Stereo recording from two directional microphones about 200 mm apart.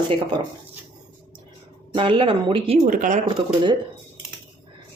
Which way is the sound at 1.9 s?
25° right (ahead or behind).